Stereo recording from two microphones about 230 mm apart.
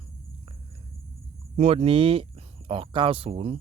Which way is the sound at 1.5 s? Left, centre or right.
Right.